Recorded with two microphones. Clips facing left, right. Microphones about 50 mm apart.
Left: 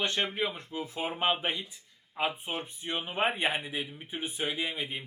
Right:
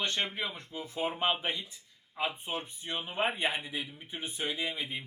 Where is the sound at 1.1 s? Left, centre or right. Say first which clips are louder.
Left 4 dB; centre.